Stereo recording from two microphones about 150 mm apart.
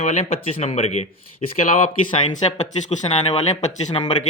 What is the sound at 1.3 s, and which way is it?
Speech, 60° left (ahead or behind).